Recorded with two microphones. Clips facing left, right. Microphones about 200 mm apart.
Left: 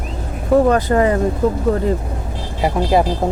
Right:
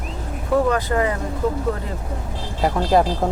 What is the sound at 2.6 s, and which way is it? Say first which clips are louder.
Speech: left 2 dB; 10° left (ahead or behind).